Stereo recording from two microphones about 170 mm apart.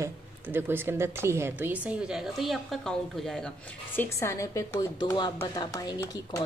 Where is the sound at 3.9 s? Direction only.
15° left (ahead or behind).